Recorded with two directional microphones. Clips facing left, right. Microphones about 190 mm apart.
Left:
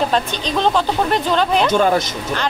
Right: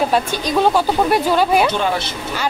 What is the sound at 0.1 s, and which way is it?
Speech, 10° right (ahead or behind).